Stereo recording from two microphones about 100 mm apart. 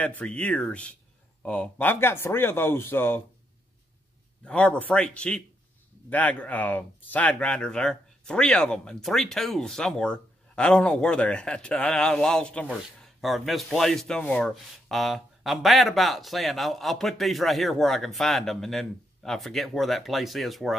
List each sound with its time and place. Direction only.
0.0 s speech: 10° left (ahead or behind)
4.5 s speech: 15° left (ahead or behind)
13.2 s speech: centre (ahead or behind)